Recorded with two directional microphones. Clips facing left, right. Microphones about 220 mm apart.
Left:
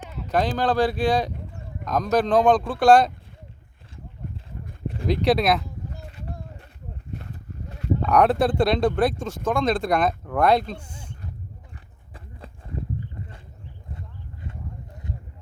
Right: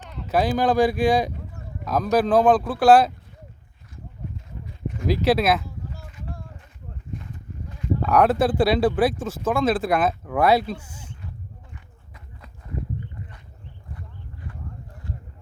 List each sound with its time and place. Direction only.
0.1 s a sound: 5° left (ahead or behind)
0.3 s speech: 10° right (ahead or behind)
5.0 s speech: centre (ahead or behind)
6.0 s a sound: 35° left (ahead or behind)
8.0 s speech: centre (ahead or behind)
11.7 s run: 30° left (ahead or behind)